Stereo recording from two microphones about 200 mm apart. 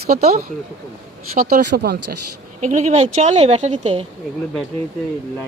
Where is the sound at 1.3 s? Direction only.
45° right (ahead or behind).